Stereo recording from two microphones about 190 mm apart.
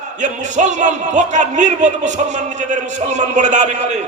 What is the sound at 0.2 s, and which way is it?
A man's voice, 40° right (ahead or behind).